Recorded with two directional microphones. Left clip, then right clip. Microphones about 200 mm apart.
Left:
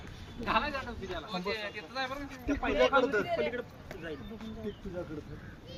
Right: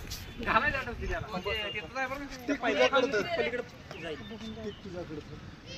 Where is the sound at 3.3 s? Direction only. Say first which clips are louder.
Right 1 dB; 60° left (ahead or behind).